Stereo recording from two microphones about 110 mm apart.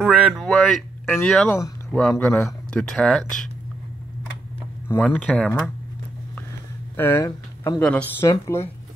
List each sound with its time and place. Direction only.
0.0 s a sound: 10° right (ahead or behind)
0.4 s speech: centre (ahead or behind)
4.8 s speech: 20° left (ahead or behind)
7.0 s speech: 20° left (ahead or behind)
7.2 s speech: 35° left (ahead or behind)
7.8 s speech: 10° left (ahead or behind)
8.3 s speech: 25° left (ahead or behind)